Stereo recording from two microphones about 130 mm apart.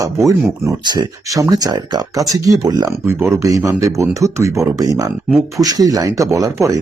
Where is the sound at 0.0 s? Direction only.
25° right (ahead or behind).